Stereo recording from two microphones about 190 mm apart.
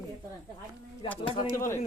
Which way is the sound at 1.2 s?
30° left (ahead or behind).